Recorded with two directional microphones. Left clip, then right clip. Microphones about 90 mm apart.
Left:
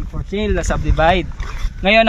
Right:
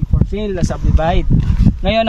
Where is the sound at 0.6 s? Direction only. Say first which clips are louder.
Left 5 dB; 20° right (ahead or behind).